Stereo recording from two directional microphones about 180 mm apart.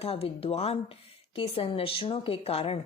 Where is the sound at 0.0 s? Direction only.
35° left (ahead or behind).